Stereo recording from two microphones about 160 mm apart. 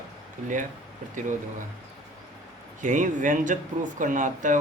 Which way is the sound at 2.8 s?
50° right (ahead or behind).